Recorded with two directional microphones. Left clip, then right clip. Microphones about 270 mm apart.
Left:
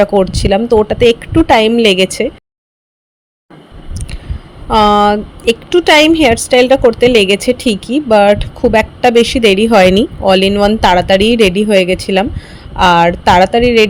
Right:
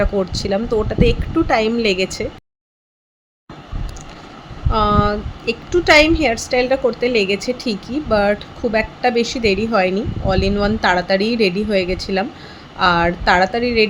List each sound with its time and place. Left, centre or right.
0.0 s a woman's voice: left
4.7 s a woman's voice: left